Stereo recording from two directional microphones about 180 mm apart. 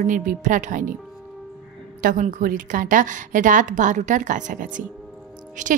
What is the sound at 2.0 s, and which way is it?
A woman's voice, 45° right (ahead or behind).